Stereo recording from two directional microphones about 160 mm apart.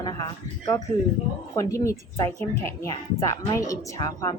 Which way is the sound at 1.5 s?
20° left (ahead or behind).